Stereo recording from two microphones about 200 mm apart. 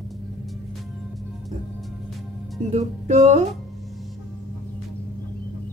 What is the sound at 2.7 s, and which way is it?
Speech, 35° right (ahead or behind).